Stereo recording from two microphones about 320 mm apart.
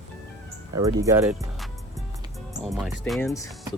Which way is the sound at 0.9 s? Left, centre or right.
Centre.